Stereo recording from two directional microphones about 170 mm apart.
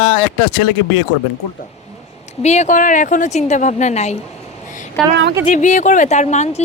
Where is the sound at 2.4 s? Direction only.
40° left (ahead or behind).